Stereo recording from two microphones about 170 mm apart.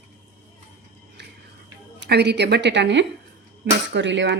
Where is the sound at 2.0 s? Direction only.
80° right.